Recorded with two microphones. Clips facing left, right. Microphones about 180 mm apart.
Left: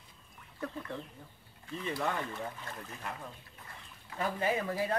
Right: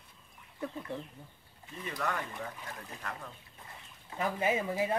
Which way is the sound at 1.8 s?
25° left (ahead or behind).